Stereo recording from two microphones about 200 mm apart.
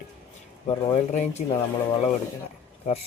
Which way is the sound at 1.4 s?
35° left (ahead or behind).